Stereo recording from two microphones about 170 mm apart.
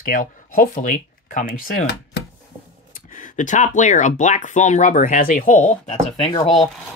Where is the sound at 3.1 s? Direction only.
50° left (ahead or behind).